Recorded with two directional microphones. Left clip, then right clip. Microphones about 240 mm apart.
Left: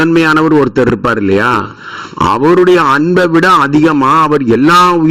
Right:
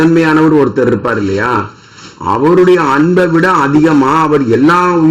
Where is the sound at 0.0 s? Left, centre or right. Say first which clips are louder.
Even; left.